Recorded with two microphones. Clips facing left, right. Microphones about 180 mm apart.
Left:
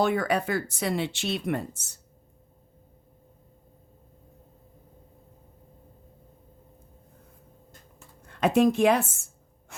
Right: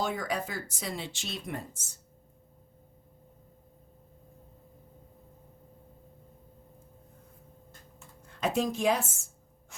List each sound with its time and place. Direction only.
0.0 s speech: 65° left (ahead or behind)
8.3 s speech: 60° left (ahead or behind)